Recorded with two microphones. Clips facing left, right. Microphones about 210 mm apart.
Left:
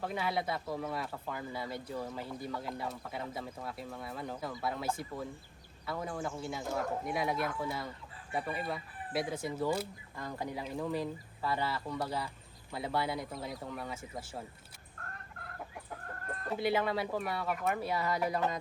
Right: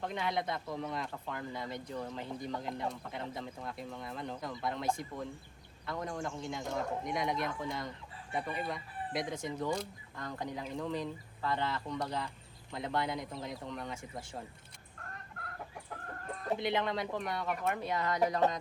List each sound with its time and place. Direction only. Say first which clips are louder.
0.0 s speech: left 1 dB; 5° left (ahead or behind)
16.3 s speech: left 1 dB; 5° left (ahead or behind)